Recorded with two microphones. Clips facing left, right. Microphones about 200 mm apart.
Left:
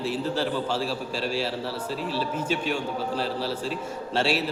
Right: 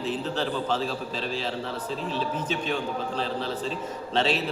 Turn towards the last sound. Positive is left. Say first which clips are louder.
# even
turn(degrees=10)  # may be behind; listen again after turning